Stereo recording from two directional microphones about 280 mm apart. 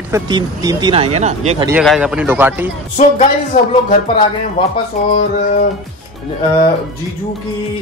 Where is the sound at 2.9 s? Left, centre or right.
Left.